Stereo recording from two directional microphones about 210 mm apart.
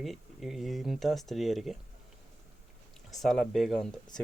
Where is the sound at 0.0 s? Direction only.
Centre (ahead or behind).